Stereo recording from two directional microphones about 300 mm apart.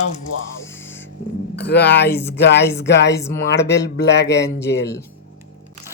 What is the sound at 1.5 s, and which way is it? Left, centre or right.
Speech, left.